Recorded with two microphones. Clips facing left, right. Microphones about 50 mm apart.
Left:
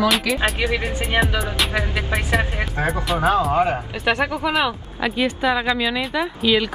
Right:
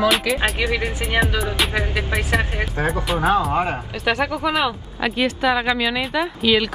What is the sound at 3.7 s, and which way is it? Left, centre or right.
Speech, centre.